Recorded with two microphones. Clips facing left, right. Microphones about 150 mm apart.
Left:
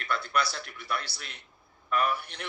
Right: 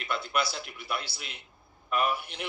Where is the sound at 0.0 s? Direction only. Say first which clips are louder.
Left 1 dB; 20° right (ahead or behind).